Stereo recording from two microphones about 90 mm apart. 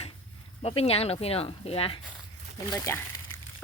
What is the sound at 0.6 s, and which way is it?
Speech, 90° left.